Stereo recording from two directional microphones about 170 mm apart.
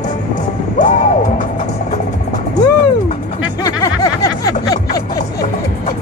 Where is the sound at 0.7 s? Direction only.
45° left (ahead or behind).